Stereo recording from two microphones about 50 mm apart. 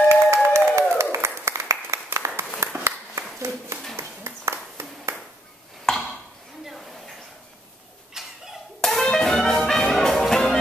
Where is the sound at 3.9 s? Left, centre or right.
Right.